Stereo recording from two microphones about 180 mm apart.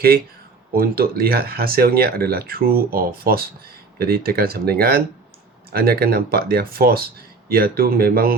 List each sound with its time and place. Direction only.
0.8 s speech: 55° right (ahead or behind)